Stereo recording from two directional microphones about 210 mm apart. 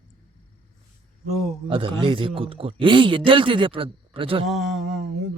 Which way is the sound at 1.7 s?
25° right (ahead or behind).